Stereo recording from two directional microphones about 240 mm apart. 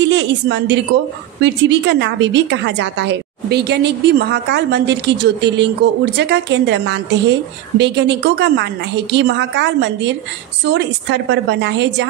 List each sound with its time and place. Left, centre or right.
0.0 s a woman's voice: right